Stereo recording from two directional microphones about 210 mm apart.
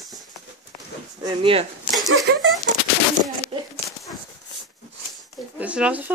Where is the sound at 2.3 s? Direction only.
55° right (ahead or behind).